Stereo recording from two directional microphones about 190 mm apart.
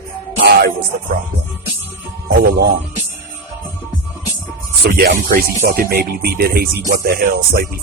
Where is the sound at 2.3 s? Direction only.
55° right (ahead or behind).